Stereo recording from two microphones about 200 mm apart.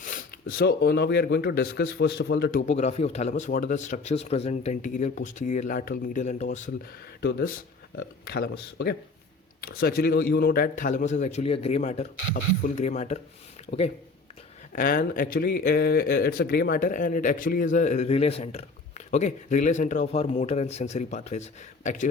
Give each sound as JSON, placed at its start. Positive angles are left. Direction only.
{"t": 0.4, "sound": "speech", "side_deg": 60}
{"t": 7.2, "sound": "speech", "side_deg": 55}
{"t": 14.7, "sound": "speech", "side_deg": 45}